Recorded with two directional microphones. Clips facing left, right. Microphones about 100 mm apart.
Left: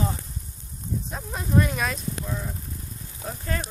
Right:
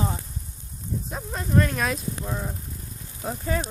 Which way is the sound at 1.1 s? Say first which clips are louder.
Right 1 dB; centre (ahead or behind).